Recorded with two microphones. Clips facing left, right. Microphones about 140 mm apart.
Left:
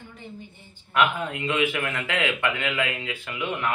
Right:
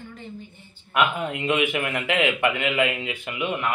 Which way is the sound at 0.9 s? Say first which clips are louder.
Even; 15° right (ahead or behind).